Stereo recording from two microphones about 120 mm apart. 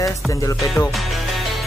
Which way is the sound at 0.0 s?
25° left (ahead or behind).